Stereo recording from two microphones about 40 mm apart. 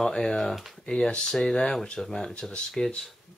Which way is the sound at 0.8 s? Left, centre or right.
Left.